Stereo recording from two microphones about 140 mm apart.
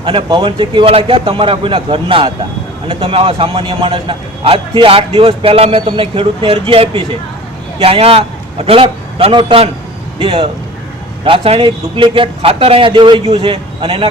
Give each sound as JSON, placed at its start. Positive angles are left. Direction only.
{"t": 0.0, "sound": "a man's voice", "side_deg": -35}